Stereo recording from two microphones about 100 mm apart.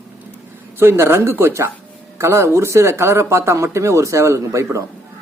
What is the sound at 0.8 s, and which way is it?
Speech, 25° right (ahead or behind).